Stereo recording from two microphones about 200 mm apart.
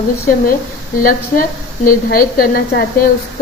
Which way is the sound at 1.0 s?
45° left (ahead or behind).